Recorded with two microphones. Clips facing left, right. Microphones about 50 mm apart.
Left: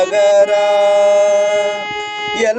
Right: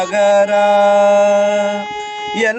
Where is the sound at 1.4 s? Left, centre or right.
Left.